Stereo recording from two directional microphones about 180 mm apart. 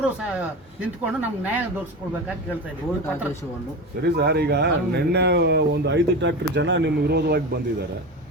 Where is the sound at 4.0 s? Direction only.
65° right (ahead or behind).